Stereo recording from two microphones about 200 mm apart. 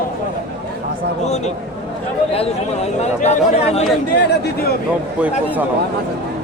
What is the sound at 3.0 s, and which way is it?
Speech, 35° left (ahead or behind).